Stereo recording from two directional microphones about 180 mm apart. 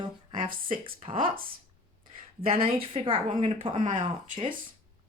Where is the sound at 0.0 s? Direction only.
30° right (ahead or behind).